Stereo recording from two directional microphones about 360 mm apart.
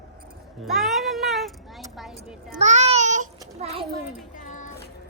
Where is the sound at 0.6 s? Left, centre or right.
Centre.